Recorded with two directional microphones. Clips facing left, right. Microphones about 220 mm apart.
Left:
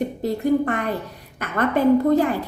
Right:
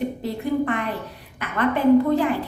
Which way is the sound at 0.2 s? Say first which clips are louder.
Left 4 dB; 45° left (ahead or behind).